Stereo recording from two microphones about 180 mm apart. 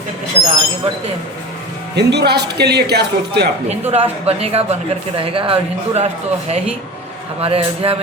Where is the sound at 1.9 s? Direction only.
65° right (ahead or behind).